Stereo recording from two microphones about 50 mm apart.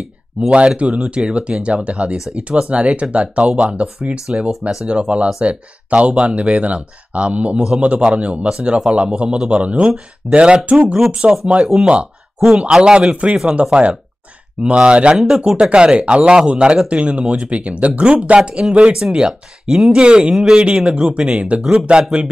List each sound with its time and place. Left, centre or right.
0.7 s speech: right
4.5 s speech: centre
4.8 s speech: right
11.6 s speech: centre; by 15.1 s right
15.1 s speech: centre
15.7 s speech: right